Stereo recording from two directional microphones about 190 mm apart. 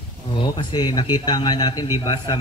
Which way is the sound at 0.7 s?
20° left (ahead or behind).